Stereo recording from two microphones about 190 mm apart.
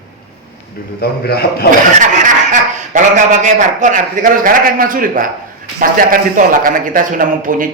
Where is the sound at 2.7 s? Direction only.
40° right (ahead or behind).